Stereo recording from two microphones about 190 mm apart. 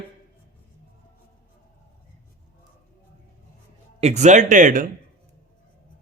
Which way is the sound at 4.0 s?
35° right (ahead or behind).